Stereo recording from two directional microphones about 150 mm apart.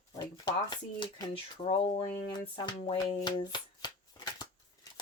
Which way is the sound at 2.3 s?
30° left (ahead or behind).